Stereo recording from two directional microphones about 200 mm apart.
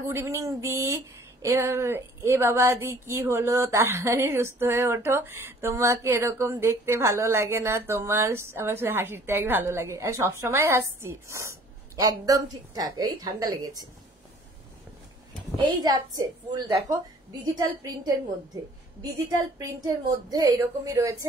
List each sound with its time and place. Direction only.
0.1 s speech: 15° right (ahead or behind)
15.6 s a woman's voice: 20° right (ahead or behind)